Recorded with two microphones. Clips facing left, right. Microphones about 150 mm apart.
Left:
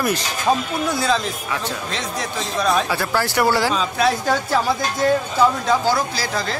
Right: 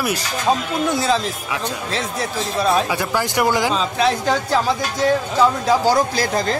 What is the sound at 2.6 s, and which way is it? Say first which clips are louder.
Speech: right 1 dB; 20° right (ahead or behind).